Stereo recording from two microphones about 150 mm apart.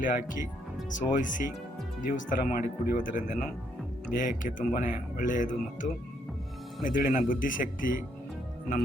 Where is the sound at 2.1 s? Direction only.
70° left (ahead or behind).